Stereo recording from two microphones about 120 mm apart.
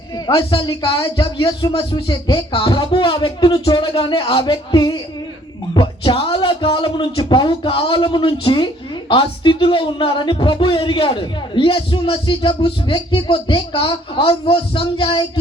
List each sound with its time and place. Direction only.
0.3 s speech: 45° left (ahead or behind)